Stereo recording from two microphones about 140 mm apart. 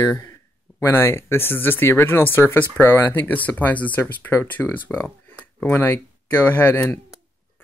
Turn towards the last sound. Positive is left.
turn(degrees=15)  # may be behind; listen again after turning